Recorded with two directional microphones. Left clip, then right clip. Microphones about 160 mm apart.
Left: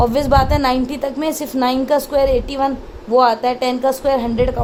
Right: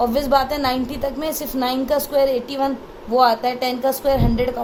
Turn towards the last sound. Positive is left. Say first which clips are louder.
# left 3 dB
turn(degrees=45)  # may be behind; listen again after turning